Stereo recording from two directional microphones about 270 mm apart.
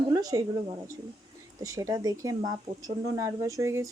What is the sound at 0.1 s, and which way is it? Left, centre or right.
Speech, centre.